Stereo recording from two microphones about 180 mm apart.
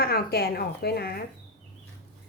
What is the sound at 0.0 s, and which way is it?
A woman's voice, 60° left (ahead or behind).